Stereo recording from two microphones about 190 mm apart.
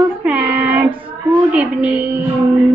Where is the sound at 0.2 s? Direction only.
5° right (ahead or behind).